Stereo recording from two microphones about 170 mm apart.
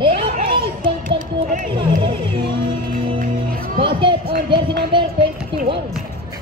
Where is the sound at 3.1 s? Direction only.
60° right (ahead or behind).